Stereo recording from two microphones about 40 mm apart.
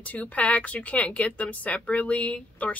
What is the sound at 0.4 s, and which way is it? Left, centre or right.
A woman's voice, left.